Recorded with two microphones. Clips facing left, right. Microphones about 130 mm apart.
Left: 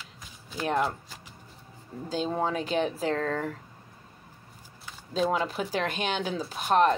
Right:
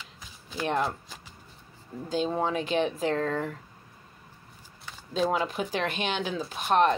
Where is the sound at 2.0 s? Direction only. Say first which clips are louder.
Right 1 dB; 40° left (ahead or behind).